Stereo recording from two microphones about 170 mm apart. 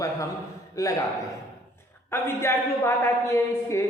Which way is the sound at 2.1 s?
15° left (ahead or behind).